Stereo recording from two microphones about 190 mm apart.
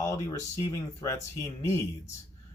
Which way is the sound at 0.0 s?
15° left (ahead or behind).